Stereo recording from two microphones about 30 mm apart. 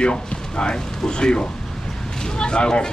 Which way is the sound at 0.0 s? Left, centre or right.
Left.